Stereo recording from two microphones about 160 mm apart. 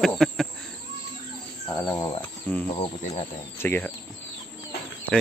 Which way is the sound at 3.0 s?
40° left (ahead or behind).